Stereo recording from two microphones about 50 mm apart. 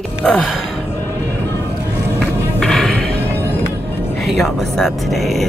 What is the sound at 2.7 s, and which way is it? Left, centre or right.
Music, centre.